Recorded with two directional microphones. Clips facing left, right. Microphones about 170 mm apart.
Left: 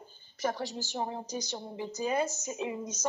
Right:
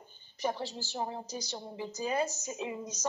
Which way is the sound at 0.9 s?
20° left (ahead or behind).